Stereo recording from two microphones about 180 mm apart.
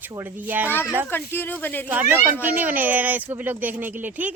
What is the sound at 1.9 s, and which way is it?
Speech, 10° right (ahead or behind).